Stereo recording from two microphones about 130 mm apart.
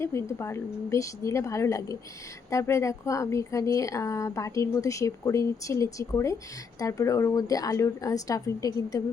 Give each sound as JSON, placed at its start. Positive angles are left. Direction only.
{"t": 0.0, "sound": "a woman's voice", "side_deg": 20}